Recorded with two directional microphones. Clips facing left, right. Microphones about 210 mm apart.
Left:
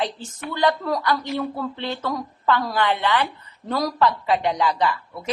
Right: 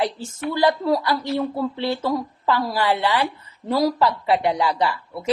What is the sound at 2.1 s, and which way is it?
Speech, 25° right (ahead or behind).